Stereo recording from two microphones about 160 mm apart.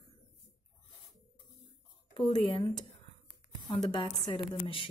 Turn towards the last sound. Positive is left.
turn(degrees=35)  # may be behind; listen again after turning